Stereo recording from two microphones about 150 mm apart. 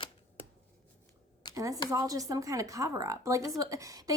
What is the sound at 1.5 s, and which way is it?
A woman's voice, 20° right (ahead or behind).